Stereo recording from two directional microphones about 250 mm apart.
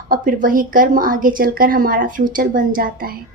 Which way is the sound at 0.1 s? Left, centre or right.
Right.